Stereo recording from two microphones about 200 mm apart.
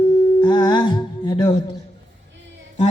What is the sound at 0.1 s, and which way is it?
Busy signal, 20° left (ahead or behind).